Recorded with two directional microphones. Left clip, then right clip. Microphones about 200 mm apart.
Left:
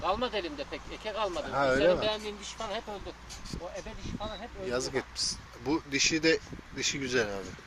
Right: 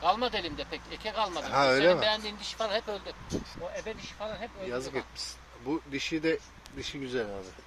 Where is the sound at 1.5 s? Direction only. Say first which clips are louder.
Right 2 dB; 10° right (ahead or behind).